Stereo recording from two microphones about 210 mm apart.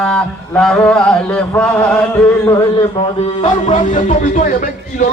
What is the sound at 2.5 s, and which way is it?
A man's voice, 20° left (ahead or behind).